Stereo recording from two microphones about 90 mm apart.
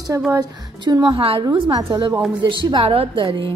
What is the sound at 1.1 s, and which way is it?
Speech, 90° right.